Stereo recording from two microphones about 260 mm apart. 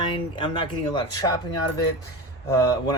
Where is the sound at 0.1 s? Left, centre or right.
Centre.